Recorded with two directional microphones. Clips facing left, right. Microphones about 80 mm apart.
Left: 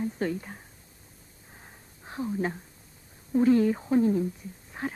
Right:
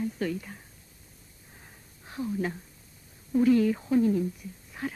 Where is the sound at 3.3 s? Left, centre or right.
Left.